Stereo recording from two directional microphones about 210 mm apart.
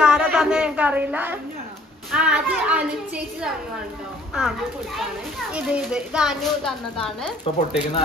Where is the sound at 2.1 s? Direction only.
5° right (ahead or behind).